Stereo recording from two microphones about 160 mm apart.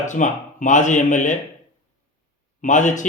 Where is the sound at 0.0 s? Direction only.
50° left (ahead or behind).